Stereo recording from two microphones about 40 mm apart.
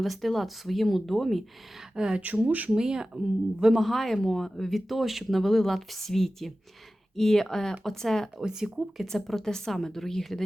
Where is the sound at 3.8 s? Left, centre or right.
Centre.